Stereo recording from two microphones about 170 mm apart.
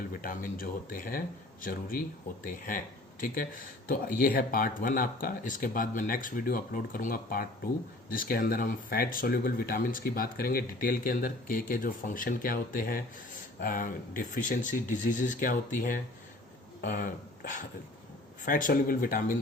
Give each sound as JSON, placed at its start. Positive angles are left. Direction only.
{"t": 0.1, "sound": "speech", "side_deg": 55}